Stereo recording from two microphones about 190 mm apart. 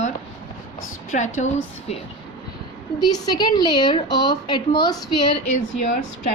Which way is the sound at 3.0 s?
20° left (ahead or behind).